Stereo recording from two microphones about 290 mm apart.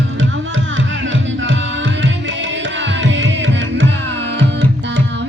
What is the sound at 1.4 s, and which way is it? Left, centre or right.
Tabla, right.